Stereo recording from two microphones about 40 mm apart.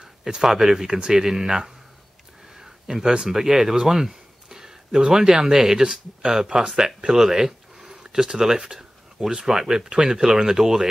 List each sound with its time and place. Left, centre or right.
0.0 s speech: centre
7.1 s a sound: centre
9.3 s speech: right
9.6 s speech: centre